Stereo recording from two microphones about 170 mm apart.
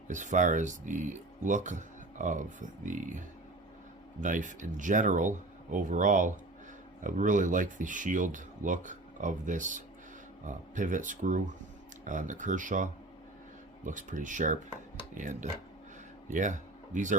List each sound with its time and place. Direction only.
0.1 s speech: 45° right (ahead or behind)